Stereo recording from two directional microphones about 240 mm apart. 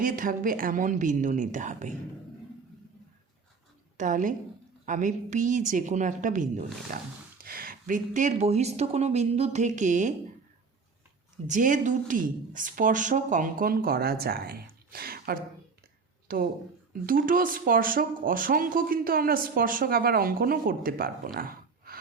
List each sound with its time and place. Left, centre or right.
0.0 s speech: right
3.9 s a woman's voice: right
11.4 s speech: right
21.3 s a sound: right